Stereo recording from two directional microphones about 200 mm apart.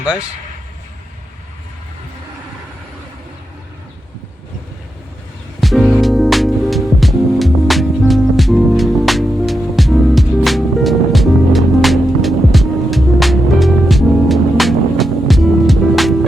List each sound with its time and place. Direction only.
0.0 s speech: 5° right (ahead or behind)
5.5 s music: centre (ahead or behind)